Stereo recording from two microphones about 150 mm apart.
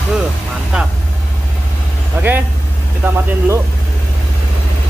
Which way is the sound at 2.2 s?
15° right (ahead or behind).